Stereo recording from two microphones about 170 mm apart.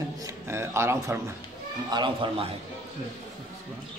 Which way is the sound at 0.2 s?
15° right (ahead or behind).